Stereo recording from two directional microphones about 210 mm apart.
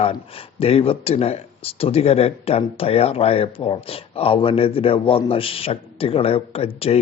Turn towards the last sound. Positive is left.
turn(degrees=30)  # may be behind; listen again after turning